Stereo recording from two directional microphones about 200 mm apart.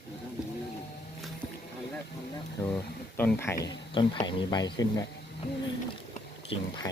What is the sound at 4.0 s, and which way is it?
Speech, 25° left (ahead or behind).